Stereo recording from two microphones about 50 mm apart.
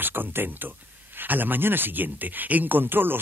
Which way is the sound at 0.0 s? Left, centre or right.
Right.